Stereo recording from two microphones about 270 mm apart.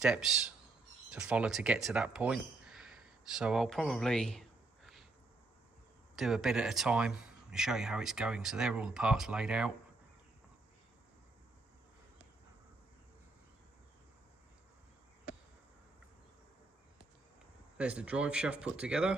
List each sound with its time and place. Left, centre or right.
0.0 s speech: centre
6.1 s speech: centre
17.7 s speech: centre